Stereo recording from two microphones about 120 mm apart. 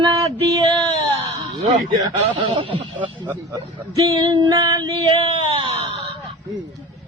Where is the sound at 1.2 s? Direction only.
70° right (ahead or behind).